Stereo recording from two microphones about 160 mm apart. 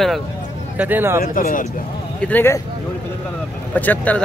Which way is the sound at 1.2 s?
60° left (ahead or behind).